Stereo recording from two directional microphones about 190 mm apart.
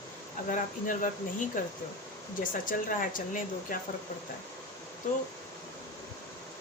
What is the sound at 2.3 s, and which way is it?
Speech, 45° left (ahead or behind).